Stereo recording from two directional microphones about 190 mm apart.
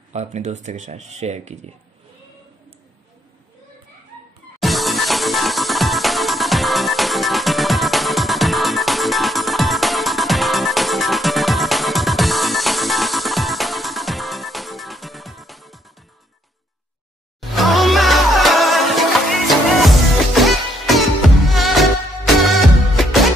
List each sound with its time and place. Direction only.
0.1 s speech: 35° right (ahead or behind)
4.6 s music: centre (ahead or behind)
17.4 s music: centre (ahead or behind)